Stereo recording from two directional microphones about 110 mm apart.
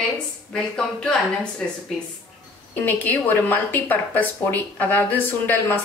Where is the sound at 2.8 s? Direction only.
15° left (ahead or behind).